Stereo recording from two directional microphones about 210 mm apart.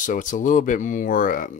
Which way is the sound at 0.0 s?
40° left (ahead or behind).